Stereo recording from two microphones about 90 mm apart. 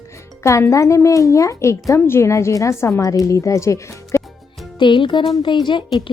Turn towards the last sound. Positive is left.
turn(degrees=60)  # may be behind; listen again after turning